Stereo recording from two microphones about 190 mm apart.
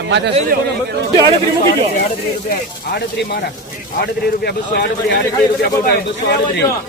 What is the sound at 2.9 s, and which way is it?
Speech, 55° left (ahead or behind).